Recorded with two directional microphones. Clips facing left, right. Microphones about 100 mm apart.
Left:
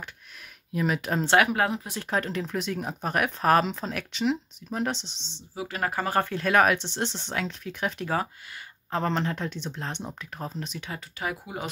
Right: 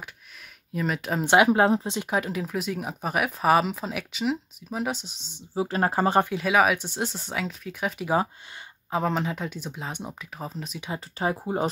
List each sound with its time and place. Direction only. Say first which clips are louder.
0.7 s speech: left 1 dB; centre (ahead or behind)
1.2 s speech: right 4 dB; 20° right (ahead or behind)
2.0 s speech: right 1 dB; 10° right (ahead or behind)
5.5 s speech: right 5 dB; 30° right (ahead or behind)
6.2 s speech: even; 5° right (ahead or behind)
11.1 s speech: right 7 dB; 35° right (ahead or behind)